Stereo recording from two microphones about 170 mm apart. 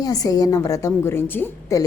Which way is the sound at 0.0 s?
20° left (ahead or behind).